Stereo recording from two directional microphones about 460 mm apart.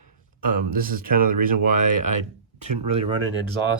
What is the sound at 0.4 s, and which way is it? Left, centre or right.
Speech, centre.